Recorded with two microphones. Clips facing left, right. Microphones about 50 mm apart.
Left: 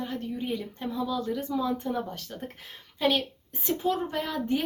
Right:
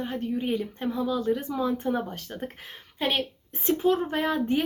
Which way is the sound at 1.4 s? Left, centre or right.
Right.